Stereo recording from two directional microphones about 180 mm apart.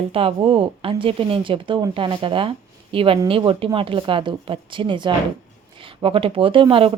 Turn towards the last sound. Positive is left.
turn(degrees=-30)  # may be behind; listen again after turning